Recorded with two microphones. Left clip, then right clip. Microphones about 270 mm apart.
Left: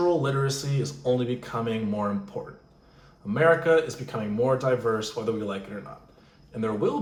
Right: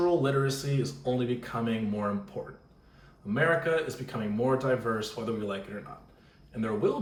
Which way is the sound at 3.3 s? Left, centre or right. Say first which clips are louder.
Left 6 dB; centre.